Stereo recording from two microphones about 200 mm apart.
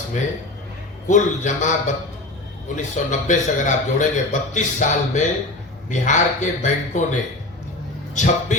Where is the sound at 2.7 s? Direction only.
35° left (ahead or behind).